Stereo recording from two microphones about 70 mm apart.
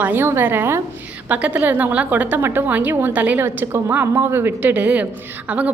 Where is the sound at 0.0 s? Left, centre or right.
Right.